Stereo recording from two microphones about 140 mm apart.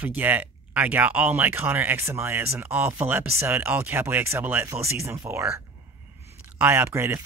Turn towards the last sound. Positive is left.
turn(degrees=-20)  # may be behind; listen again after turning